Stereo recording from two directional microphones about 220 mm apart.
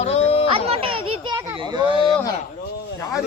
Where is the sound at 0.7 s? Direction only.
25° right (ahead or behind).